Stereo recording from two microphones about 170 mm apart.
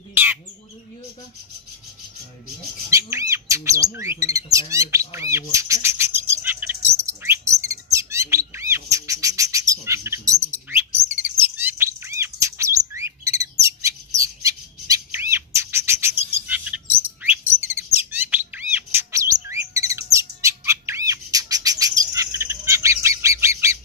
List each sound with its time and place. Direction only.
0.1 s bird: 10° right (ahead or behind)
2.9 s squawk: 15° right (ahead or behind)
4.5 s bird: 20° right (ahead or behind)
16.4 s chirp: 10° right (ahead or behind)
17.2 s bird: 10° right (ahead or behind)